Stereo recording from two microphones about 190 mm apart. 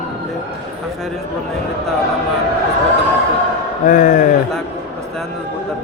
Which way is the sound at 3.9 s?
40° left (ahead or behind).